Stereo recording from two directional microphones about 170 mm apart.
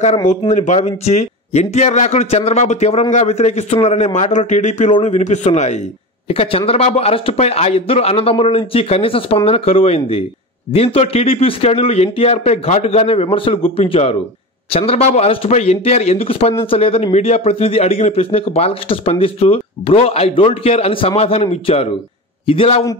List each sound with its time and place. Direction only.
0.5 s a man's voice: 40° left (ahead or behind)